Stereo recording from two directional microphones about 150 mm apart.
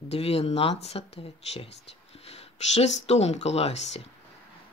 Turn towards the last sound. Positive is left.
turn(degrees=45)  # may be behind; listen again after turning